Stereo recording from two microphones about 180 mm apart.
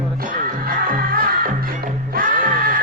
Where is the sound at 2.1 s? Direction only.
50° right (ahead or behind).